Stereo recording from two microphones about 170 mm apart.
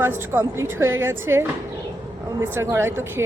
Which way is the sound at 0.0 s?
15° right (ahead or behind).